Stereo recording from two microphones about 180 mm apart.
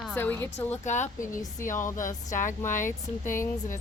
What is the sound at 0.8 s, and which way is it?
Speech, 40° left (ahead or behind).